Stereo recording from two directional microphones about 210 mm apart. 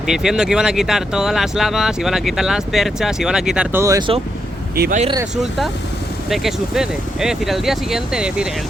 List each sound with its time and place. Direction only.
0.1 s speech: centre (ahead or behind); by 4.2 s 20° right (ahead or behind)
4.7 s speech: 45° right (ahead or behind)
5.4 s speech: centre (ahead or behind)